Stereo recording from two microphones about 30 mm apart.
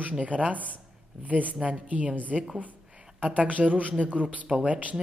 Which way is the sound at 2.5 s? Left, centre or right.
Right.